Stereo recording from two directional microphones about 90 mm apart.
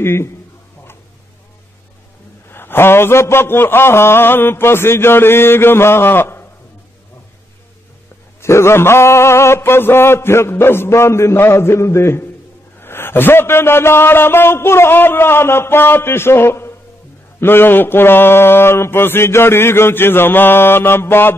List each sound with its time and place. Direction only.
0.0 s mantra: 30° left (ahead or behind)
2.5 s mantra: 25° left (ahead or behind)
8.4 s mantra: 30° left (ahead or behind)